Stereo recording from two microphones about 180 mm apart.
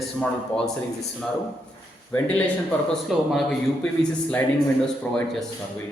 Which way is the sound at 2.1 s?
5° left (ahead or behind).